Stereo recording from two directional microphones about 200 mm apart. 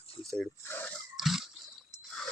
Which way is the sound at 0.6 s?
10° left (ahead or behind).